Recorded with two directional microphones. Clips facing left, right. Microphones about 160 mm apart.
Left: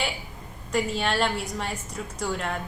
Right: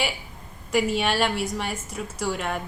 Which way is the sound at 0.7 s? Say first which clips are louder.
Right 3 dB; 5° right (ahead or behind).